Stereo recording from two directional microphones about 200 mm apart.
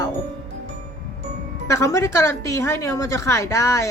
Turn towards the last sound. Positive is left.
turn(degrees=15)  # may be behind; listen again after turning